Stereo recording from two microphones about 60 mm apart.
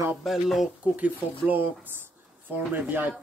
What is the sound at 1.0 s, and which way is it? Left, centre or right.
Speech, right.